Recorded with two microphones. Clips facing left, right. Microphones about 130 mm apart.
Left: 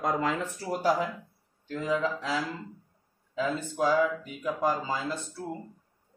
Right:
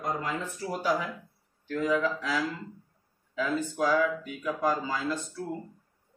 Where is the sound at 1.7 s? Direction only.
25° left (ahead or behind).